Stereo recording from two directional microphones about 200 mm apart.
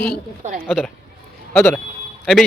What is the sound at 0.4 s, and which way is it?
Speech, 35° right (ahead or behind).